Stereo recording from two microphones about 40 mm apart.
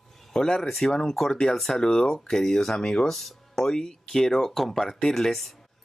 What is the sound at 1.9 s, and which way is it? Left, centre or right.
Speech, centre.